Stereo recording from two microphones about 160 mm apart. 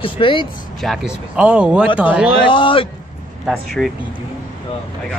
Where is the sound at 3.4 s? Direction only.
Centre (ahead or behind).